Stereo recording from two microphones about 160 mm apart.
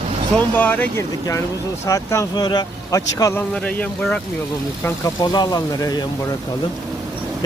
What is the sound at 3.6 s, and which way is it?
Speech, 10° left (ahead or behind).